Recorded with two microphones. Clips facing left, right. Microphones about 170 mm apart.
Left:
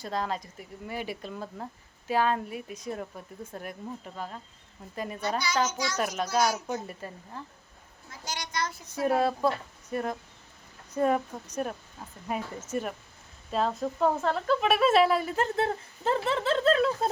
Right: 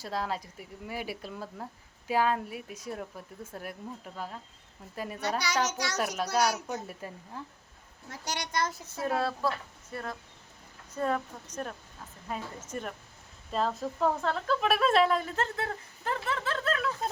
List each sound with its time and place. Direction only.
0.0 s speech: 5° right (ahead or behind)
5.6 s speech: 70° right (ahead or behind)
6.7 s speech: 5° right (ahead or behind)
8.1 s a child's voice: 70° right (ahead or behind)
9.0 s speech: 15° left (ahead or behind)
15.5 s speech: 25° left (ahead or behind)